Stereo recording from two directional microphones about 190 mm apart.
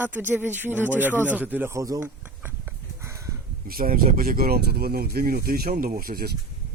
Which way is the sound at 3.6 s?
50° right (ahead or behind).